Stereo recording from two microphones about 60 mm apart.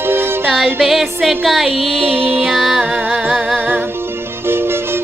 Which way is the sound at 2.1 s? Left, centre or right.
Right.